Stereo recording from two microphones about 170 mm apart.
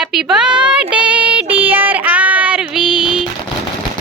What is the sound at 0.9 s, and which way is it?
Child singing, 5° right (ahead or behind).